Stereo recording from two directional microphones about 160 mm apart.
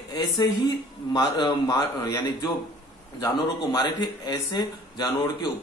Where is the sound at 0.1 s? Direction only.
25° left (ahead or behind).